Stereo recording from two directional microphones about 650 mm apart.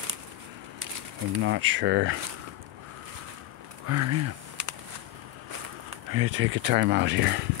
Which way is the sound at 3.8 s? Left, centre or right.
Right.